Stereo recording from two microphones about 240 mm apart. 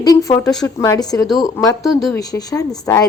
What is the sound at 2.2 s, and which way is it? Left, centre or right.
Speech, centre.